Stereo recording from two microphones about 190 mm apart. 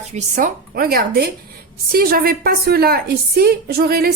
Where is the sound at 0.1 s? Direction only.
40° right (ahead or behind).